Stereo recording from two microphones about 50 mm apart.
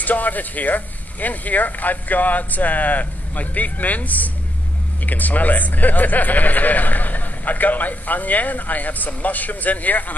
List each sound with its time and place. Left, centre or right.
0.0 s speech: left